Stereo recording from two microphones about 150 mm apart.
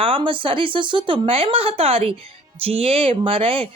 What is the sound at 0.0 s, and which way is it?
Speech, 35° right (ahead or behind).